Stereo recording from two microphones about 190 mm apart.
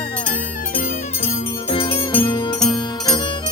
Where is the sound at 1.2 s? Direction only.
30° left (ahead or behind).